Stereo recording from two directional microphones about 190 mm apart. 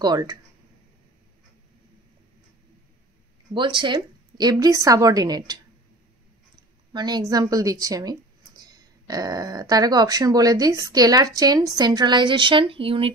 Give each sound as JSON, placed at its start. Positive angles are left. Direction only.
{"t": 0.0, "sound": "speech", "side_deg": -20}
{"t": 3.5, "sound": "speech", "side_deg": -25}
{"t": 6.9, "sound": "speech", "side_deg": -20}